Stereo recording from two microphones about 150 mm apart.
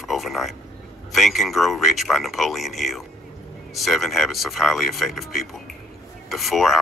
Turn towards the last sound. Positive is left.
turn(degrees=0)  # may be behind; listen again after turning